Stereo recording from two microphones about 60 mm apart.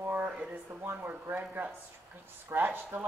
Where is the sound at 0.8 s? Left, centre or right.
Right.